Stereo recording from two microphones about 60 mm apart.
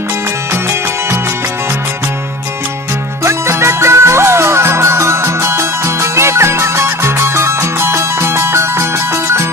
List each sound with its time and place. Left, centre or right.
3.3 s music: right